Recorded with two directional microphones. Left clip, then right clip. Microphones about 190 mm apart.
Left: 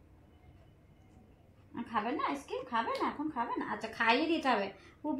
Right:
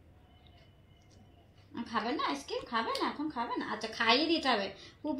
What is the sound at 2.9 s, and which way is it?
A woman's voice, 10° left (ahead or behind).